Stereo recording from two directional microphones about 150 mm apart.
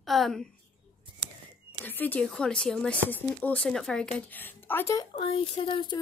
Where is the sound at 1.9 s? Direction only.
10° left (ahead or behind).